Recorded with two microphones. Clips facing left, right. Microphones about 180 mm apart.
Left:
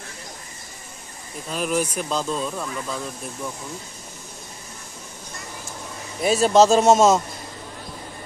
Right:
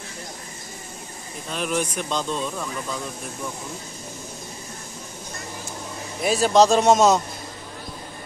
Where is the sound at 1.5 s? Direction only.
5° left (ahead or behind).